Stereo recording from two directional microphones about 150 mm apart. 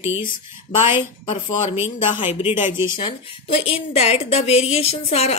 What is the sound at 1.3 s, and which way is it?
A woman's voice, 50° left (ahead or behind).